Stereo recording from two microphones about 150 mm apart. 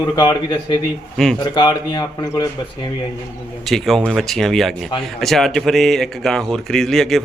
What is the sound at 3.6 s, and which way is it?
Speech, centre (ahead or behind).